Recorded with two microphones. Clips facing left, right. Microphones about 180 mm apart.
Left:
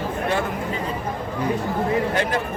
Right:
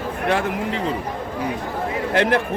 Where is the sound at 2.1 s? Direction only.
70° right (ahead or behind).